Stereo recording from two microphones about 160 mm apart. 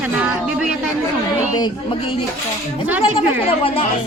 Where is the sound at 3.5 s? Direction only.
35° left (ahead or behind).